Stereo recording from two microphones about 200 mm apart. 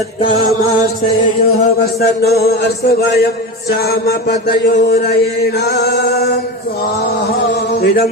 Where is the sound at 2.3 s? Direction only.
50° left (ahead or behind).